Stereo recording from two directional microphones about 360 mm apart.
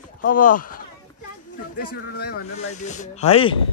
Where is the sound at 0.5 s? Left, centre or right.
Left.